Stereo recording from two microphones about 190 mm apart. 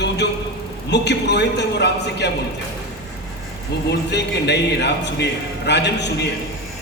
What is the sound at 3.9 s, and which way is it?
A man's voice, 60° left (ahead or behind).